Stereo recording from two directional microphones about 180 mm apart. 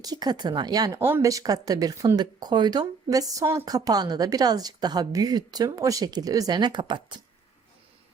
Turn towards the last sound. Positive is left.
turn(degrees=-25)  # may be behind; listen again after turning